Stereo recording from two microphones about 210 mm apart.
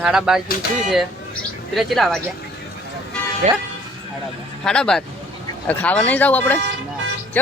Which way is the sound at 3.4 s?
35° right (ahead or behind).